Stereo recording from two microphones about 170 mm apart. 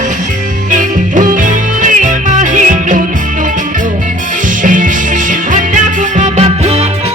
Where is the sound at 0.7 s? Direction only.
50° right (ahead or behind).